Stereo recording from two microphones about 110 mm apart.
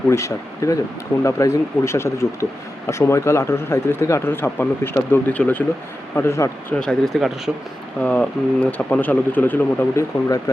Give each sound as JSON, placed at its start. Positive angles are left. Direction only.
{"t": 0.1, "sound": "speech", "side_deg": 25}
{"t": 6.7, "sound": "speech", "side_deg": 5}
{"t": 8.0, "sound": "speech", "side_deg": 15}